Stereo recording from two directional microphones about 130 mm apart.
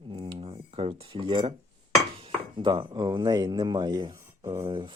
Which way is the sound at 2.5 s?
40° right (ahead or behind).